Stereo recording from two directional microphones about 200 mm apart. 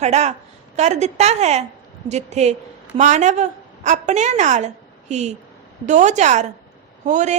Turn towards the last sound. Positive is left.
turn(degrees=-35)  # may be behind; listen again after turning